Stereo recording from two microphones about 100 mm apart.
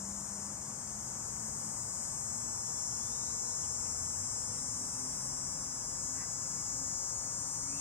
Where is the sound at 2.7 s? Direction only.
20° left (ahead or behind).